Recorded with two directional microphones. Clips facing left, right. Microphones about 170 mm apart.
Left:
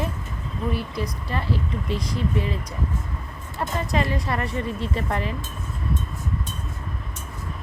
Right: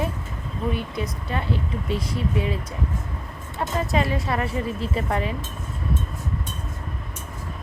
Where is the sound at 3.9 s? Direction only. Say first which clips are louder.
Even; 5° right (ahead or behind).